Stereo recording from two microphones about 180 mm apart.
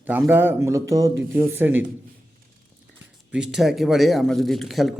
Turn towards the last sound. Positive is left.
turn(degrees=0)  # may be behind; listen again after turning